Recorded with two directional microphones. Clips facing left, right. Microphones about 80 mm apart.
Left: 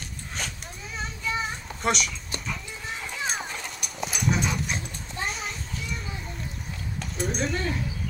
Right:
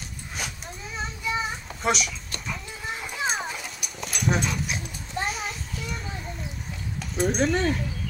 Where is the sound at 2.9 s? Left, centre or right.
Centre.